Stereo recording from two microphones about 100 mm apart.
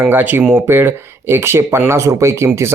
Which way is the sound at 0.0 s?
20° right (ahead or behind).